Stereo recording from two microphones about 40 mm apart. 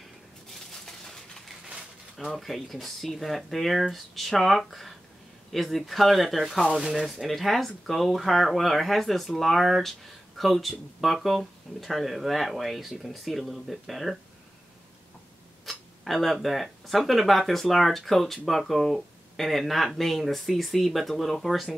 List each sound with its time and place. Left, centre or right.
0.5 s a sound: centre
2.1 s speech: centre
15.6 s speech: centre